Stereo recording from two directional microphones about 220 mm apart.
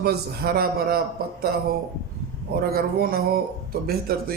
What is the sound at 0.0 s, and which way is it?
A man's voice, 45° right (ahead or behind).